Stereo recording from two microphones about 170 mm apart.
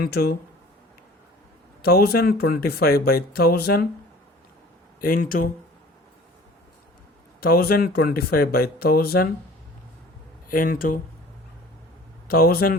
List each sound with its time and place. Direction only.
0.0 s speech: 65° left (ahead or behind)
1.8 s speech: 65° left (ahead or behind)
4.9 s speech: 55° left (ahead or behind)
7.4 s speech: 65° left (ahead or behind)
10.5 s speech: 55° left (ahead or behind)
12.3 s speech: 65° left (ahead or behind)